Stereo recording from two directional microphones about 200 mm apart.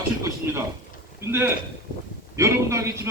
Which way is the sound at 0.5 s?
10° right (ahead or behind).